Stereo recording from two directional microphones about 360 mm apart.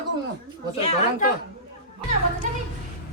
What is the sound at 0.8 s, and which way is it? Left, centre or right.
Speech, centre.